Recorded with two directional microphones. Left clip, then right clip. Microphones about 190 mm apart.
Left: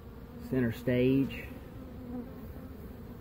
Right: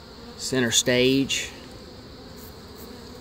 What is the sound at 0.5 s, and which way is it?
Speech, 10° right (ahead or behind).